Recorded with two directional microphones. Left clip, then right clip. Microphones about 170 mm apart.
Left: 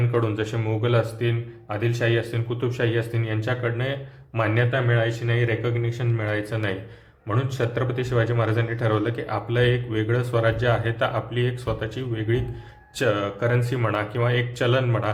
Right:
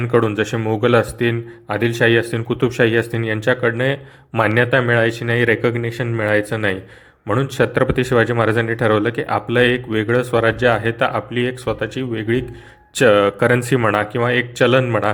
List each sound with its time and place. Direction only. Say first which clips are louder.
0.1 s speech: right 10 dB; 40° right (ahead or behind)